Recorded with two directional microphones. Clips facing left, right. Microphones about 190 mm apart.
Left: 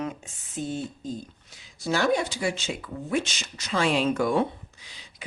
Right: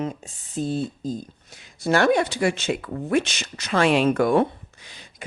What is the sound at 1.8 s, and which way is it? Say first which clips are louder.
Speech: right 5 dB; 65° right (ahead or behind).